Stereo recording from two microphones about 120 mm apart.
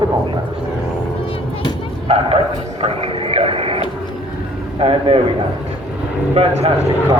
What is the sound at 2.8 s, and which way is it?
Speech, 50° right (ahead or behind).